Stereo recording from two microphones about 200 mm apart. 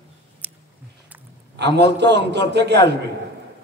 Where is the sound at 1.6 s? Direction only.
60° right (ahead or behind).